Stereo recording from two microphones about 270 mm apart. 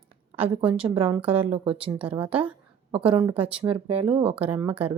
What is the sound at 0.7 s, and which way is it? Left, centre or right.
Speech, centre.